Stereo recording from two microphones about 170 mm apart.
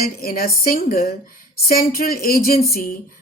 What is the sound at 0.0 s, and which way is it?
A woman's voice, 60° left (ahead or behind).